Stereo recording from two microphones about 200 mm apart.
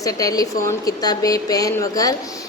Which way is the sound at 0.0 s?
15° left (ahead or behind).